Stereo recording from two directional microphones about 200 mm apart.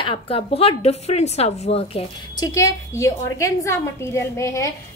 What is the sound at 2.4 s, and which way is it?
A woman's voice, 15° left (ahead or behind).